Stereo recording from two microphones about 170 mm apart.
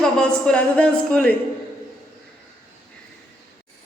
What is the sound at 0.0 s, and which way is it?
Speech, 5° left (ahead or behind).